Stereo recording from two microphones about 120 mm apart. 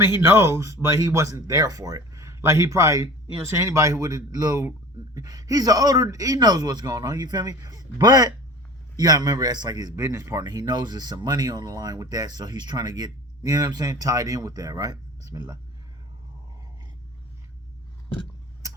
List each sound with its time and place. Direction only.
0.2 s a man's voice: 20° right (ahead or behind)